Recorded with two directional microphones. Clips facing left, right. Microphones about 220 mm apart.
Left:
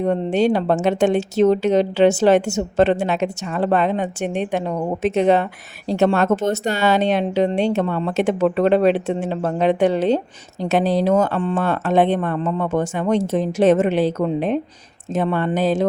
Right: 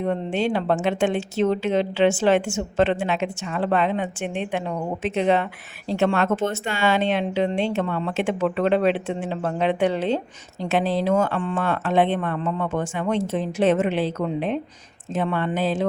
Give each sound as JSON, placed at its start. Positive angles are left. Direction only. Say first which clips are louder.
{"t": 0.0, "sound": "speech", "louder": "left 5 dB", "side_deg": 40}